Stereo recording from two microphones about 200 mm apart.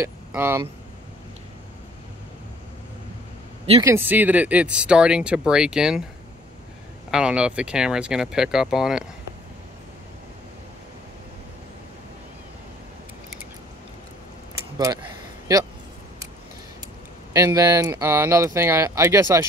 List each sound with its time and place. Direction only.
0.0 s speech: 10° right (ahead or behind)
3.8 s speech: 10° right (ahead or behind)
7.1 s speech: 5° right (ahead or behind)
15.5 s speech: 15° right (ahead or behind)
17.3 s speech: 15° right (ahead or behind)